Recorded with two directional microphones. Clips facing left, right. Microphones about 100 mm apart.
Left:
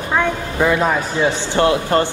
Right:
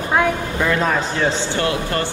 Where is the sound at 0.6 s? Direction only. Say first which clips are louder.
Left 3 dB; 10° left (ahead or behind).